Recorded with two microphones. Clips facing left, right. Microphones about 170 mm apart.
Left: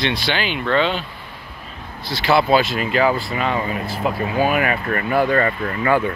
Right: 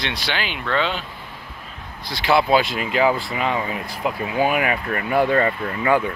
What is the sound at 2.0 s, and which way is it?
Speech, 15° right (ahead or behind).